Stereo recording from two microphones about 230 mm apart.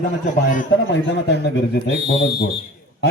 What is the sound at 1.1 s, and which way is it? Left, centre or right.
Speech, left.